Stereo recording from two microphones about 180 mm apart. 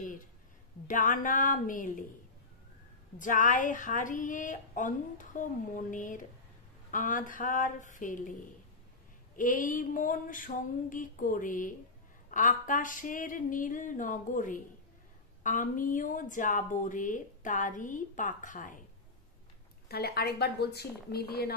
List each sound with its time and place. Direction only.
0.0 s a sound: 45° left (ahead or behind)
0.8 s a woman's voice: 45° left (ahead or behind)
3.2 s a woman's voice: 45° left (ahead or behind)
9.4 s a woman's voice: 45° left (ahead or behind)
19.9 s speech: 60° left (ahead or behind)